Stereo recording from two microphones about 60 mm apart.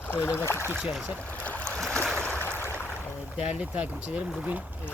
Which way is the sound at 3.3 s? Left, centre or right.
Centre.